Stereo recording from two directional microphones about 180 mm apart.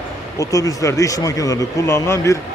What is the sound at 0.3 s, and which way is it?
Speech, 20° left (ahead or behind).